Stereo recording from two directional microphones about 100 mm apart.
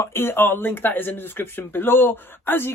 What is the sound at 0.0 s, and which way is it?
Speech, 25° left (ahead or behind).